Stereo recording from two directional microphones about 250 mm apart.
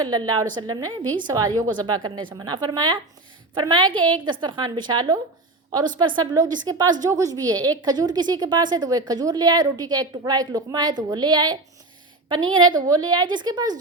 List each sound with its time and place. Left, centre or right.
0.0 s a woman's voice: centre
12.7 s a woman's voice: centre